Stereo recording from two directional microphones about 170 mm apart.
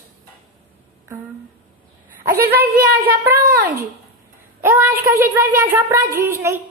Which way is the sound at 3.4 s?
55° right (ahead or behind).